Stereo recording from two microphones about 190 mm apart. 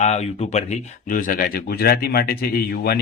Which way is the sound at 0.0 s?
35° left (ahead or behind).